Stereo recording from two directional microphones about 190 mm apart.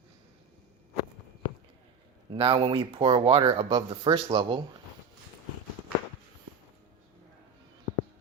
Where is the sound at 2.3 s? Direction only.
30° right (ahead or behind).